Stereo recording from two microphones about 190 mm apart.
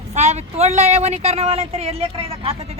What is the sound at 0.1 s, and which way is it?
Speech, 35° right (ahead or behind).